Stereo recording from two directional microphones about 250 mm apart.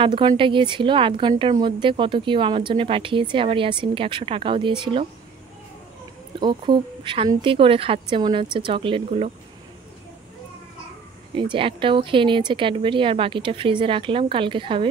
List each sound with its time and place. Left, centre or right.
0.0 s speech: centre
6.4 s speech: centre
11.3 s speech: centre